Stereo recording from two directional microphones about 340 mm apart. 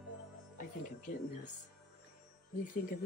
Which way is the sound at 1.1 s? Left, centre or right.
Left.